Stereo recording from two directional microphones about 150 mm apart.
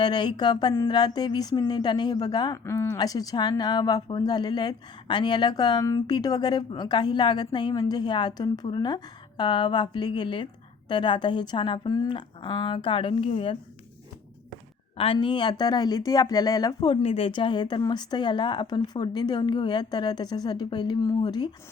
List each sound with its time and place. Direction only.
0.0 s a woman's voice: 30° left (ahead or behind)
14.9 s speech: 35° left (ahead or behind)
17.0 s speech: 40° left (ahead or behind)